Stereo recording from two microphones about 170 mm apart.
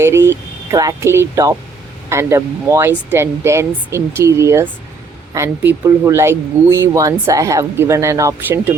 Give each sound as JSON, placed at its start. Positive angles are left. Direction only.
{"t": 0.0, "sound": "speech", "side_deg": -15}